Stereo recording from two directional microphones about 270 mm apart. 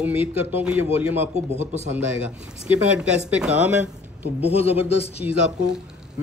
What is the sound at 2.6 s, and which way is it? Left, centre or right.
Speech, centre.